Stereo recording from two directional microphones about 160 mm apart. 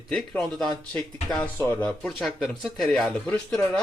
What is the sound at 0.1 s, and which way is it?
Speech, 5° left (ahead or behind).